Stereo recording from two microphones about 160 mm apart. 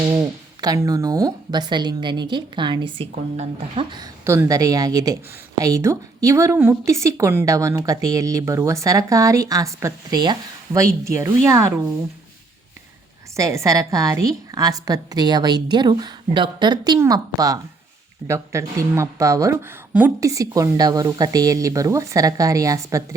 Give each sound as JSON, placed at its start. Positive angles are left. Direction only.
{"t": 0.1, "sound": "speech", "side_deg": -25}
{"t": 4.2, "sound": "speech", "side_deg": -15}
{"t": 13.3, "sound": "speech", "side_deg": -20}